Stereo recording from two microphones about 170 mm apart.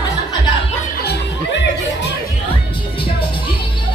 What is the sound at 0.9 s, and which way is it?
Chuckle, 75° left (ahead or behind).